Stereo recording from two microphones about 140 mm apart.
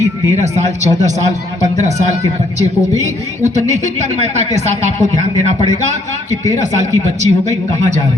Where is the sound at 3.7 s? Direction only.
55° right (ahead or behind).